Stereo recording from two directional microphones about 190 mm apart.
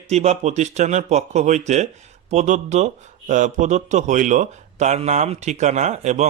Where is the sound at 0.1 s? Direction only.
35° right (ahead or behind).